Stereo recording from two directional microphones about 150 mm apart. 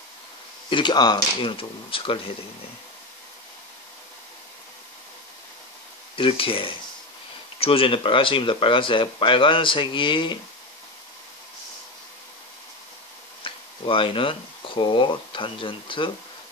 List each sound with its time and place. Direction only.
0.7 s speech: 30° left (ahead or behind)
6.1 s speech: 35° left (ahead or behind)
13.4 s speech: 35° left (ahead or behind)